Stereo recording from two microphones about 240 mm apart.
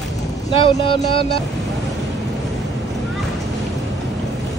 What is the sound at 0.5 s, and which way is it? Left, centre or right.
Speech, left.